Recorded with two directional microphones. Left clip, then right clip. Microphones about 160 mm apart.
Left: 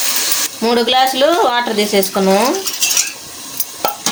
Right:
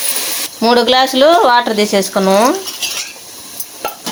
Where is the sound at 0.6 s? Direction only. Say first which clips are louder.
Right 3 dB; 45° right (ahead or behind).